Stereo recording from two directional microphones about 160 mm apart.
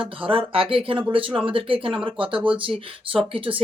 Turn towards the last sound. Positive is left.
turn(degrees=-35)  # may be behind; listen again after turning